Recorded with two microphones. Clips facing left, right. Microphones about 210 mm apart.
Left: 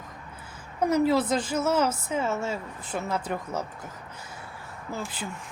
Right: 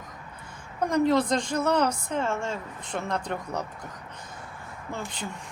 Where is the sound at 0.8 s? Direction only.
5° left (ahead or behind).